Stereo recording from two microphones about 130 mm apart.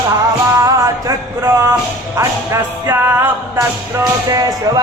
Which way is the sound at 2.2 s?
20° right (ahead or behind).